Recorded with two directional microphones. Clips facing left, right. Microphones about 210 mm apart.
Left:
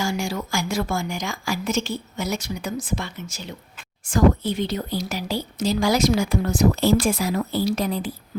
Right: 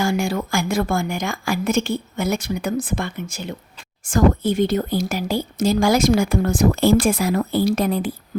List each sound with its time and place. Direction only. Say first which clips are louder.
0.0 s a woman's voice: right 5 dB; 55° right (ahead or behind)